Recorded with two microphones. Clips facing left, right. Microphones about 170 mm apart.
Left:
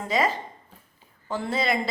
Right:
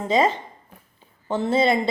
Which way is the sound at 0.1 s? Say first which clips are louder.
Right 5 dB; 25° right (ahead or behind).